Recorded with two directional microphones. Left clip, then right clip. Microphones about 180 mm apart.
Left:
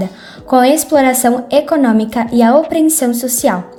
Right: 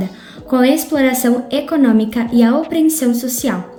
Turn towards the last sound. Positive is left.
turn(degrees=35)  # may be behind; listen again after turning